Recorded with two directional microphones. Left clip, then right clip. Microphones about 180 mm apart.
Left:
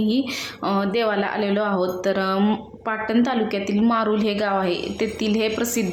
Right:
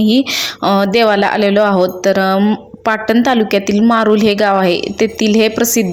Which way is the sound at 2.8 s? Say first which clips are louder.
Right 10 dB; 40° right (ahead or behind).